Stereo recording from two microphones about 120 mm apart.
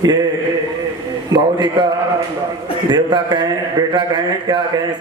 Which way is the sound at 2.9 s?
40° right (ahead or behind).